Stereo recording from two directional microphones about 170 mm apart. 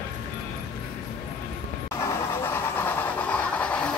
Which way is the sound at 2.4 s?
15° left (ahead or behind).